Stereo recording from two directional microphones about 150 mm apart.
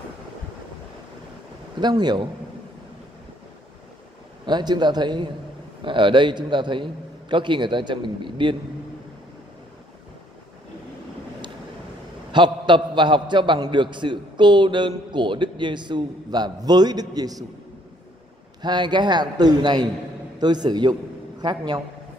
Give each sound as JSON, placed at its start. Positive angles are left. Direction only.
{"t": 1.8, "sound": "a man's voice", "side_deg": -30}
{"t": 4.5, "sound": "a man's voice", "side_deg": -30}
{"t": 12.3, "sound": "a man's voice", "side_deg": -30}
{"t": 18.6, "sound": "a man's voice", "side_deg": -30}